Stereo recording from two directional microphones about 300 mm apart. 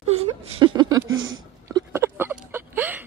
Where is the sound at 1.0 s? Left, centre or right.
Right.